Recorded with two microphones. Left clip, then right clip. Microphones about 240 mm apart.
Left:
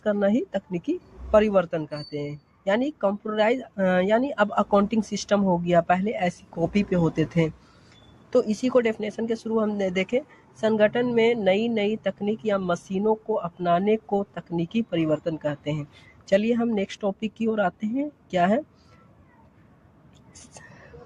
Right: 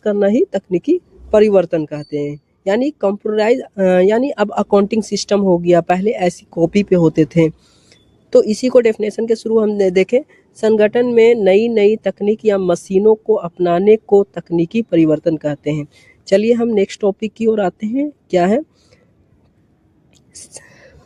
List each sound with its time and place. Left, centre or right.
0.0 s speech: right
20.3 s whispering: right